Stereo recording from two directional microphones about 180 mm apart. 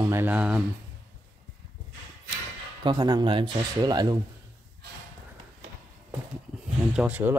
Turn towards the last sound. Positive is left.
turn(degrees=-10)  # may be behind; listen again after turning